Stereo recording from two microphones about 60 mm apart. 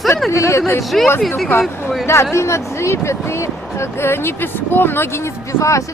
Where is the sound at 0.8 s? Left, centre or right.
Centre.